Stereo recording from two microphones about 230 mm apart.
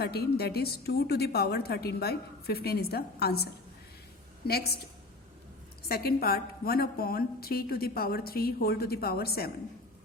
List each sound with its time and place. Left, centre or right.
0.0 s a woman's voice: left
5.9 s a woman's voice: left